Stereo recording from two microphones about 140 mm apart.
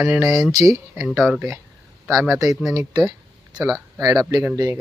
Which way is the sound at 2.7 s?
25° right (ahead or behind).